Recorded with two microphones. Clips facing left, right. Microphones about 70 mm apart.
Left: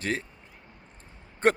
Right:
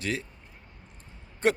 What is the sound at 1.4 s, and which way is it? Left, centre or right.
Speech, left.